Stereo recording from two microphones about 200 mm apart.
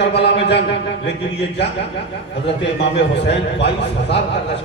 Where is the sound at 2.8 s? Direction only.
60° left (ahead or behind).